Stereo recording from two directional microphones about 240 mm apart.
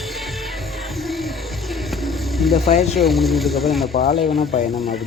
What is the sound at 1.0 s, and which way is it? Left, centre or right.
Music, centre.